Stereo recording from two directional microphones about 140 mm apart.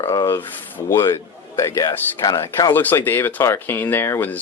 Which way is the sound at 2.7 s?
15° left (ahead or behind).